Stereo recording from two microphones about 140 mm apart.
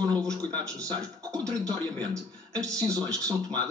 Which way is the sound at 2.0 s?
25° right (ahead or behind).